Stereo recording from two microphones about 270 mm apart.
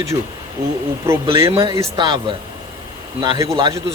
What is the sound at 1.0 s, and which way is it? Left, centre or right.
A man's voice, centre.